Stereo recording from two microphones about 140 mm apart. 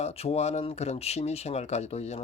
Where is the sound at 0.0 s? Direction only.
45° left (ahead or behind).